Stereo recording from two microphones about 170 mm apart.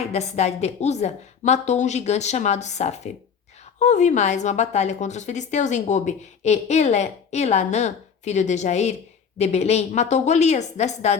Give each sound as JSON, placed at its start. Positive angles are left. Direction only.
{"t": 0.0, "sound": "a woman's voice", "side_deg": 40}